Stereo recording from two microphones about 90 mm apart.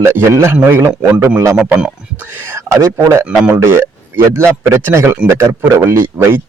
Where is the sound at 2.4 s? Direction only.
30° right (ahead or behind).